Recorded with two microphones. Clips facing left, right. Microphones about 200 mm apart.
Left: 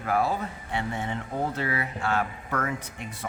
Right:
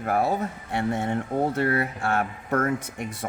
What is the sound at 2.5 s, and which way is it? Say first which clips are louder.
Speech: right 10 dB; 45° right (ahead or behind).